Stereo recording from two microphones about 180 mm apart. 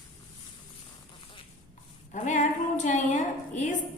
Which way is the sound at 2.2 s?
40° left (ahead or behind).